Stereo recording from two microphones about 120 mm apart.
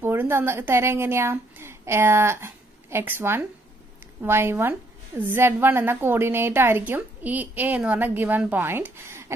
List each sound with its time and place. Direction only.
0.0 s a woman's voice: 20° right (ahead or behind)